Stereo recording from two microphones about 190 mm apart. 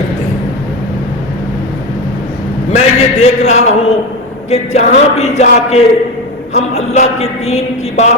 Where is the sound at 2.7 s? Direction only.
35° left (ahead or behind).